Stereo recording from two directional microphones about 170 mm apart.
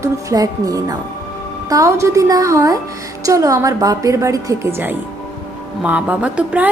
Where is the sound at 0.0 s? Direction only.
20° right (ahead or behind).